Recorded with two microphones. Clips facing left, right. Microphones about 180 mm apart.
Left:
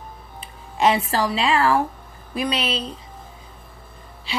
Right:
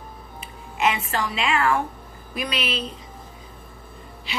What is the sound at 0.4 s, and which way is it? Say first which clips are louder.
A woman's voice: left 4 dB; 35° left (ahead or behind).